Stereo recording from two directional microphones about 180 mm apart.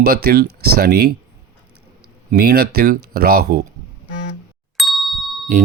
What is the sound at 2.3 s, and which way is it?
Speech, 60° right (ahead or behind).